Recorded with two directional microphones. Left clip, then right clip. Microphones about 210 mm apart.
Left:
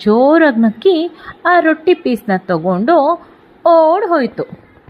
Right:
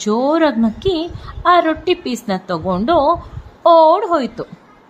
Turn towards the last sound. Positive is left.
turn(degrees=15)  # may be behind; listen again after turning